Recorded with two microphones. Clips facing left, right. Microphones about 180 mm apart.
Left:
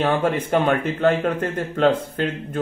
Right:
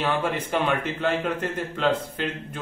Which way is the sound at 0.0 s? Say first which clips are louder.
Left 5 dB; 45° left (ahead or behind).